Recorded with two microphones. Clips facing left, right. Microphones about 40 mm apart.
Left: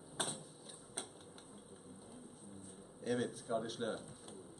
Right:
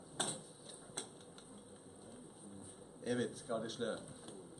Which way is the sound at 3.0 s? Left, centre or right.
Centre.